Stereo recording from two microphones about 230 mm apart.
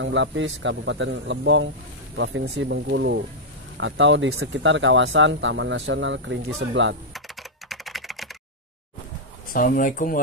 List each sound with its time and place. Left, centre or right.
0.0 s speech: right
7.7 s typing: centre
9.5 s speech: left